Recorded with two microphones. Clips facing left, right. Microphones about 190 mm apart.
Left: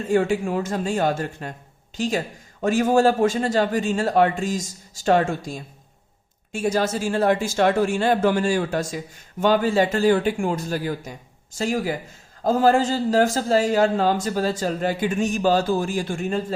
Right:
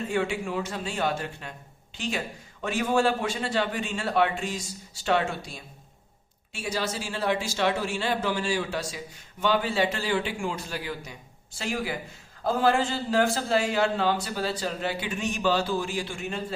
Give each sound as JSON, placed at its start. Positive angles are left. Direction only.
{"t": 0.0, "sound": "speech", "side_deg": 45}